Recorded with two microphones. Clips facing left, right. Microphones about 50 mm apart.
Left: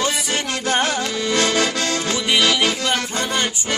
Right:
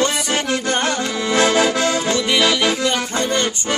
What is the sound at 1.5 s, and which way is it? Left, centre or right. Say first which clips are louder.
Accordion: right 4 dB; centre.